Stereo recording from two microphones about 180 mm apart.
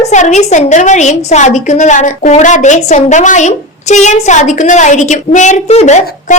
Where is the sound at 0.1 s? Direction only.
40° left (ahead or behind).